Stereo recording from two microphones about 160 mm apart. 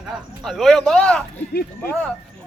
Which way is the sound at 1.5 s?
75° left (ahead or behind).